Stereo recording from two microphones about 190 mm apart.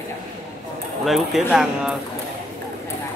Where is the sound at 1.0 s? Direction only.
Centre (ahead or behind).